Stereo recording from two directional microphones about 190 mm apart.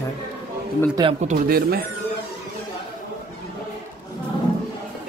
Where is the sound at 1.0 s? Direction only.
20° right (ahead or behind).